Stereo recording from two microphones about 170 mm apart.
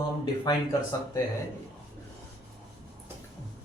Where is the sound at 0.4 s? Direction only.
20° left (ahead or behind).